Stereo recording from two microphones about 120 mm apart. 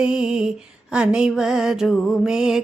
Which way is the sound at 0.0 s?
5° right (ahead or behind).